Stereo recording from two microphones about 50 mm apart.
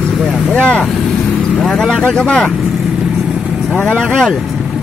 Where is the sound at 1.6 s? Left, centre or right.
Centre.